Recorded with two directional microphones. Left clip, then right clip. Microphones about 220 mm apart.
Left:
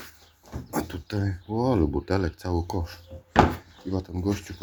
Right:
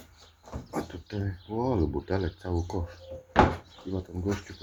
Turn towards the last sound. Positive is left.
turn(degrees=25)  # may be behind; listen again after turning